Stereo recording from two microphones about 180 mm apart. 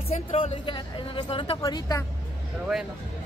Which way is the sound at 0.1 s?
35° left (ahead or behind).